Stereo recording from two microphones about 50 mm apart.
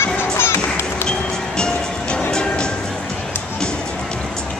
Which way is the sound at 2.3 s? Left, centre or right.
Centre.